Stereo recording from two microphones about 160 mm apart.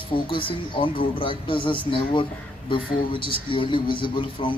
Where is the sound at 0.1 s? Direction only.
30° left (ahead or behind).